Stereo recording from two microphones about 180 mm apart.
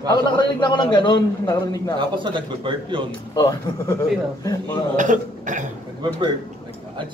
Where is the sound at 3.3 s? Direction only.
20° left (ahead or behind).